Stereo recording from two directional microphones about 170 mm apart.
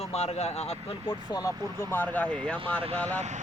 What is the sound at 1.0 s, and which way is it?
Speech, 20° left (ahead or behind).